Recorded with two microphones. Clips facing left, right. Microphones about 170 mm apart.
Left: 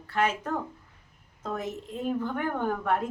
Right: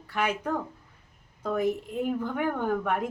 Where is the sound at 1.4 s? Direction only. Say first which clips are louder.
Right 6 dB; 10° right (ahead or behind).